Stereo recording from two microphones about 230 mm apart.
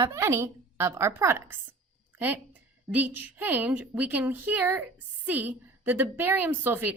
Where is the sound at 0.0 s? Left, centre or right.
Centre.